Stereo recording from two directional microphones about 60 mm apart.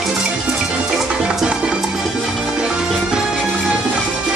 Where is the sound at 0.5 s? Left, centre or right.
Centre.